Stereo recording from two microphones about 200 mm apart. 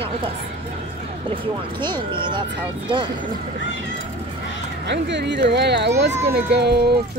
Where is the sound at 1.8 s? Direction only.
25° right (ahead or behind).